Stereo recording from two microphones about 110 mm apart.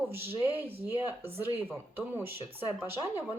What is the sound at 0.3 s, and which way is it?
Speech, 20° right (ahead or behind).